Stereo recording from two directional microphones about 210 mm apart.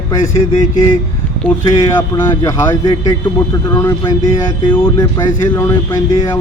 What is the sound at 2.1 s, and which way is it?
Speech, 15° left (ahead or behind).